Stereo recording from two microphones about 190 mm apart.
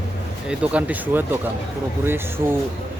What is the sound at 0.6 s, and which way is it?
Speech, 5° right (ahead or behind).